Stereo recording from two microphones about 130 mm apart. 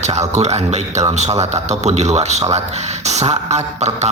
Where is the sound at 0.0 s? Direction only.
60° right (ahead or behind).